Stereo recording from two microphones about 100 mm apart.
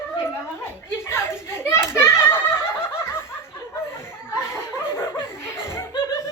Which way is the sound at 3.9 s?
25° left (ahead or behind).